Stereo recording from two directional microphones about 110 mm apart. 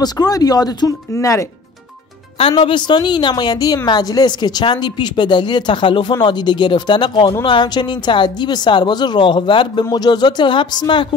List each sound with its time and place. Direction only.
0.0 s speech: 35° left (ahead or behind)
2.6 s a woman's voice: 45° left (ahead or behind)